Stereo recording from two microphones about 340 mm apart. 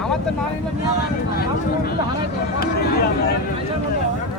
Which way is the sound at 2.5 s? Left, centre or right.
Left.